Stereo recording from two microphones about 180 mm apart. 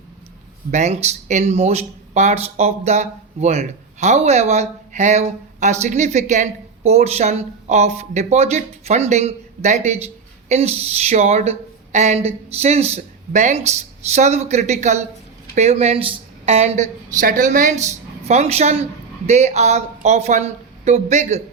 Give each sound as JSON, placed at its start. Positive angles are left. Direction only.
{"t": 0.7, "sound": "speech", "side_deg": -40}